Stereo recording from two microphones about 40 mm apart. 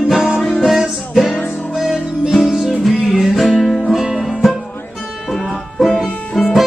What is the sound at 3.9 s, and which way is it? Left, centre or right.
Music, centre.